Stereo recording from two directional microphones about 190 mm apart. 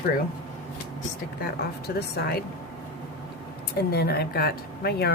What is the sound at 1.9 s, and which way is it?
Speech, 55° left (ahead or behind).